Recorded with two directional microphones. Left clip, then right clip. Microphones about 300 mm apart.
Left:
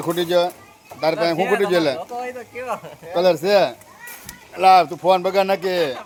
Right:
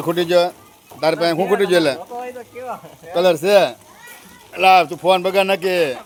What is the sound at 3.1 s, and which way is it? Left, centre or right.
A man's voice, centre.